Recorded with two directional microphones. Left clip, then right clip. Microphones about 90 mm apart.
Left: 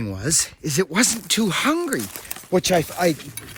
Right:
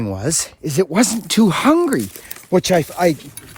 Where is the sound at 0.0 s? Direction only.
45° right (ahead or behind).